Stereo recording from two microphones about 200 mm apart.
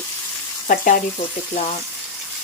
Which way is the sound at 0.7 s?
45° left (ahead or behind).